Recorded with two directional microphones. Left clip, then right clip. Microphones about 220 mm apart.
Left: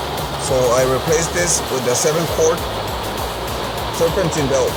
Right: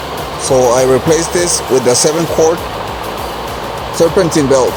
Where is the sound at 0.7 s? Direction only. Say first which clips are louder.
Right 6 dB; 20° right (ahead or behind).